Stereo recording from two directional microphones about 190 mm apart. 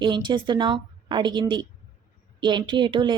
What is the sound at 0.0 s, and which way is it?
Speech, 25° right (ahead or behind).